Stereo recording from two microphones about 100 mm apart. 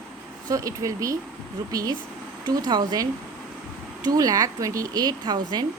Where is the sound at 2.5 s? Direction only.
45° right (ahead or behind).